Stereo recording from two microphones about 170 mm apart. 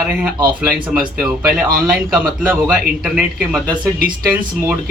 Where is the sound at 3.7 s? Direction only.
55° right (ahead or behind).